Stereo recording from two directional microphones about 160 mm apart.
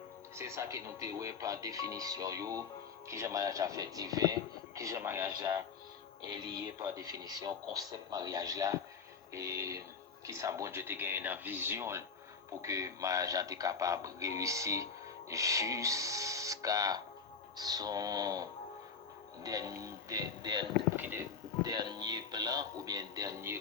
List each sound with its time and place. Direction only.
0.3 s speech: 15° right (ahead or behind)
6.7 s speech: 20° right (ahead or behind)
20.9 s music: 15° right (ahead or behind)
21.6 s speech: 25° right (ahead or behind)